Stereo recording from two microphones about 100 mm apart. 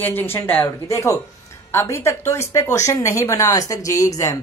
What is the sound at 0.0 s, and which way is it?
A woman's voice, 20° left (ahead or behind).